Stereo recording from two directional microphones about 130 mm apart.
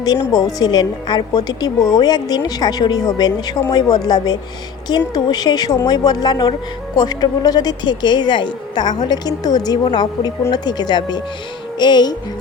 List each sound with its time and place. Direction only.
0.3 s speech: 30° left (ahead or behind)